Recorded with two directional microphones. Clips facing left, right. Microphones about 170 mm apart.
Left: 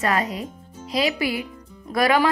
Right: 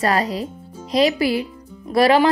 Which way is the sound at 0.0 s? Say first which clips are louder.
Right 3 dB; 35° right (ahead or behind).